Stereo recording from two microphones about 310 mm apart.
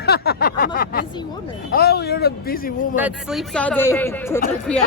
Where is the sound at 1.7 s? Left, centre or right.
Left.